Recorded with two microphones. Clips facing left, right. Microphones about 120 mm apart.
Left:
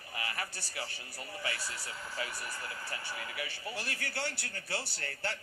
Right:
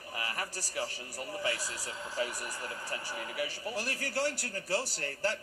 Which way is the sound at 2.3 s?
15° right (ahead or behind).